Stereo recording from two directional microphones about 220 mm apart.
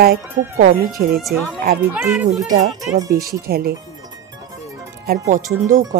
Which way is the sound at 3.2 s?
45° right (ahead or behind).